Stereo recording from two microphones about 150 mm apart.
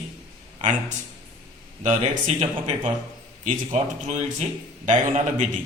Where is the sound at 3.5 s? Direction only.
50° right (ahead or behind).